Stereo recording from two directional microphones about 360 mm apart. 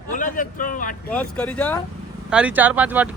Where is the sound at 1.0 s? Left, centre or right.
Centre.